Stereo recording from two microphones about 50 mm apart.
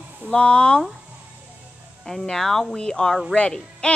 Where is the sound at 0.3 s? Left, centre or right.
Left.